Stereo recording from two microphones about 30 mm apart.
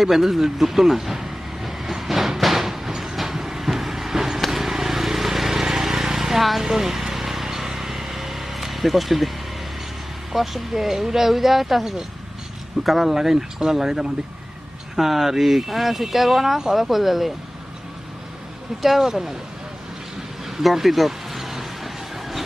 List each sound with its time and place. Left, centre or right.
0.0 s vehicle: centre
7.4 s a sound: centre
10.3 s speech: centre
13.1 s speech: centre
18.8 s speech: centre
20.4 s a sound: centre